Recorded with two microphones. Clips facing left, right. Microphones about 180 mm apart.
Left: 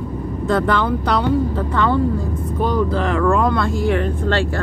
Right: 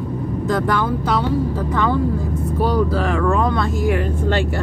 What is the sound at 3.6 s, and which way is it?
Music, 5° right (ahead or behind).